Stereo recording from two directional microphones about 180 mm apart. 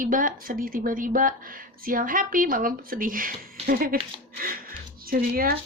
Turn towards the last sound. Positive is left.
turn(degrees=-55)  # may be behind; listen again after turning